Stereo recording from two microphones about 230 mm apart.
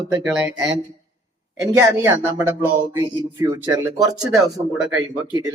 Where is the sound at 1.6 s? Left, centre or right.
Centre.